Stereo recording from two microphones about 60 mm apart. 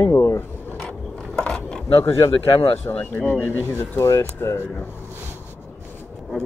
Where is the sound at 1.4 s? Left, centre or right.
Centre.